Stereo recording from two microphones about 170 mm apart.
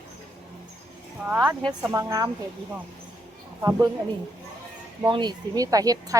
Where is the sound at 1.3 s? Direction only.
10° right (ahead or behind).